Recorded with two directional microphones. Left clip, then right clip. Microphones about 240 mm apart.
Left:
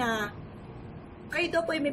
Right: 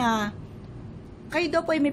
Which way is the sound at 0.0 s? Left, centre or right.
Right.